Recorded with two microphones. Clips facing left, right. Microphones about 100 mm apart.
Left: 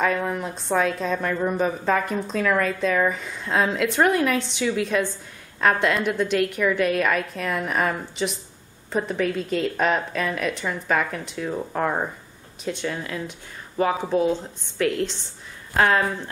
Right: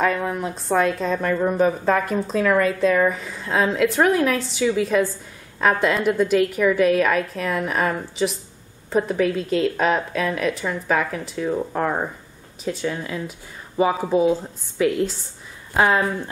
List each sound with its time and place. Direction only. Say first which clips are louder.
0.0 s a woman's voice: right 2 dB; centre (ahead or behind)